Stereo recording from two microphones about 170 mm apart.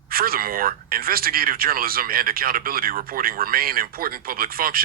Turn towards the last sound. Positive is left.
turn(degrees=-60)  # may be behind; listen again after turning